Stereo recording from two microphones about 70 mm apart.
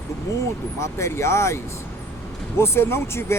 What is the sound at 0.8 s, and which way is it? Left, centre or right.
Speech, left.